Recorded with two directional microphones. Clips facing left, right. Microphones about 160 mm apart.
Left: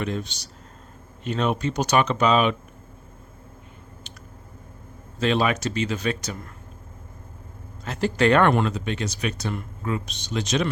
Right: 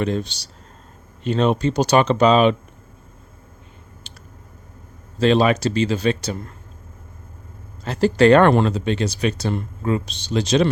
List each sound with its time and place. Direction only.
0.0 s speech: 30° right (ahead or behind)
4.1 s clicking: 30° right (ahead or behind)
5.2 s speech: 30° right (ahead or behind)
7.9 s speech: 35° right (ahead or behind)